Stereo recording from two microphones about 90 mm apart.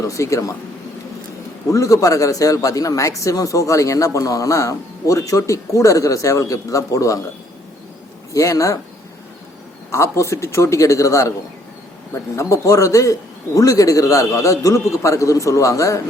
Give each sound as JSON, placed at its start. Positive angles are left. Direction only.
{"t": 0.0, "sound": "a man's voice", "side_deg": 35}
{"t": 1.7, "sound": "a man's voice", "side_deg": 35}
{"t": 8.3, "sound": "a man's voice", "side_deg": 35}
{"t": 9.9, "sound": "a man's voice", "side_deg": 35}
{"t": 12.4, "sound": "a man's voice", "side_deg": 35}